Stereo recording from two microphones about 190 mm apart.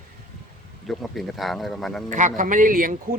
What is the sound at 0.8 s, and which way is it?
Speech, centre (ahead or behind).